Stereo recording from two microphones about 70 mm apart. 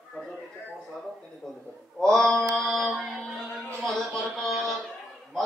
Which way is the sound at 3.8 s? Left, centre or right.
Centre.